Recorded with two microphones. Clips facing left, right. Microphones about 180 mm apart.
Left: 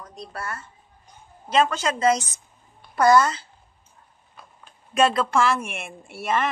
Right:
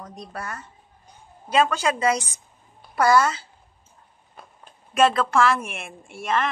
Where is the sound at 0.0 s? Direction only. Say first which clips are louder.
Even; 20° right (ahead or behind).